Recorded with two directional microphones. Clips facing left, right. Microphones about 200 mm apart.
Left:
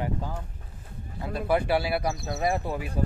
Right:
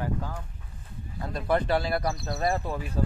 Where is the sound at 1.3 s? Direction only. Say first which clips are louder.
Left 1 dB; 10° left (ahead or behind).